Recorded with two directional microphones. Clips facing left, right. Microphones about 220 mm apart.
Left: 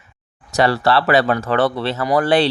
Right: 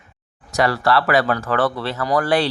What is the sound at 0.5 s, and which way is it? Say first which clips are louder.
Speech: left 2 dB; 30° left (ahead or behind).